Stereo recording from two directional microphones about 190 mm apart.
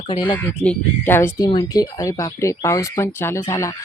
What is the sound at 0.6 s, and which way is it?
Speech, 10° left (ahead or behind).